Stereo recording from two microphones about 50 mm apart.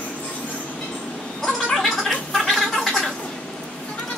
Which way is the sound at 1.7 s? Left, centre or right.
Centre.